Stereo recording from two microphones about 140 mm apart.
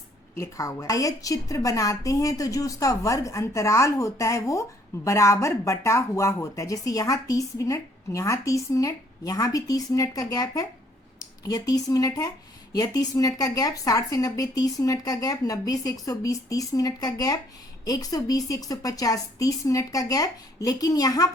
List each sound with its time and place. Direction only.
0.3 s speech: 25° left (ahead or behind)